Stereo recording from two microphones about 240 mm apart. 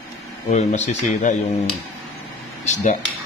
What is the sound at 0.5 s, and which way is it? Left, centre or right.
Speech, left.